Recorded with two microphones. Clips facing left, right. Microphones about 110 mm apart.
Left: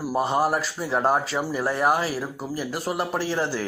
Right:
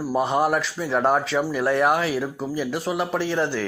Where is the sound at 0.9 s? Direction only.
5° left (ahead or behind).